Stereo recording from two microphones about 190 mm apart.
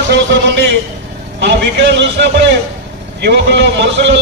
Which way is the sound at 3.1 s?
65° right (ahead or behind).